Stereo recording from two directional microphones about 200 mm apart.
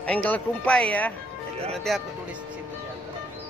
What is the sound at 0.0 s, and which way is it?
Speech, 5° left (ahead or behind).